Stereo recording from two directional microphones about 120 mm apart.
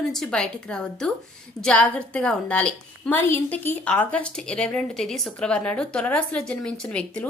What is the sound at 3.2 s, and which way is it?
A woman's voice, 20° left (ahead or behind).